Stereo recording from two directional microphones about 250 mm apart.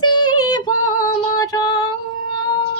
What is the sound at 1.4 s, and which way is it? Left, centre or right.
Music, centre.